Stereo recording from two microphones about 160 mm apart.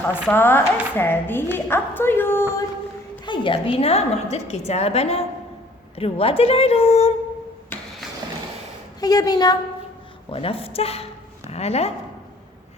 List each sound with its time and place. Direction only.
0.3 s a woman's voice: 15° left (ahead or behind)
3.2 s a woman's voice: 30° left (ahead or behind)
9.0 s a woman's voice: 25° left (ahead or behind)
10.2 s a woman's voice: 35° left (ahead or behind)